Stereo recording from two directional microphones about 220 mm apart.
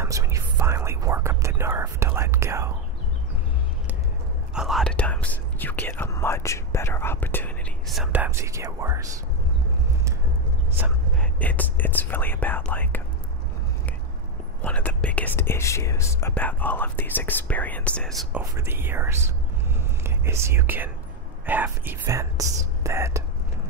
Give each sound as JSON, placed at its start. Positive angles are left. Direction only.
{"t": 0.0, "sound": "whispering", "side_deg": -15}
{"t": 4.6, "sound": "whispering", "side_deg": 0}
{"t": 11.1, "sound": "speech", "side_deg": 5}
{"t": 14.6, "sound": "speech", "side_deg": 5}
{"t": 18.4, "sound": "speech", "side_deg": -10}